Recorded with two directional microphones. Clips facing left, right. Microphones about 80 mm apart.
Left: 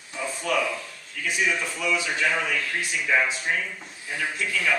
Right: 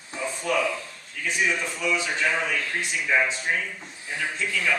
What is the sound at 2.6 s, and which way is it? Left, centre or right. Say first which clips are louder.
Speech: even; right.